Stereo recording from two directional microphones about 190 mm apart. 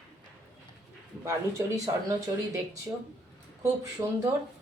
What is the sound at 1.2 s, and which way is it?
Speech, 15° right (ahead or behind).